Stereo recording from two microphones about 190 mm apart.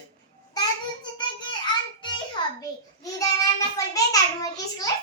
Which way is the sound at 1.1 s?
25° left (ahead or behind).